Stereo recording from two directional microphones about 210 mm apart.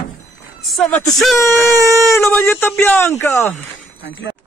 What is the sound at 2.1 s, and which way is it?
A man's voice, 10° left (ahead or behind).